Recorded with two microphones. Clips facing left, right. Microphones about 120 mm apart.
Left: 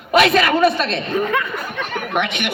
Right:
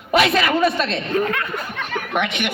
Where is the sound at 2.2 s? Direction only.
70° left (ahead or behind).